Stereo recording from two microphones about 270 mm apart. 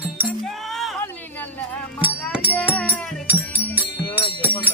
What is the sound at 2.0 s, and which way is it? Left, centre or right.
Music, centre.